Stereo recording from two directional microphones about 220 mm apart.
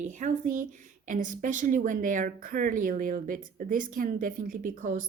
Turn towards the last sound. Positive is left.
turn(degrees=-40)  # may be behind; listen again after turning